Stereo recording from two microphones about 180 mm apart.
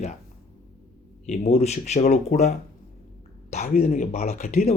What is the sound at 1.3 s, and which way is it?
Speech, 40° left (ahead or behind).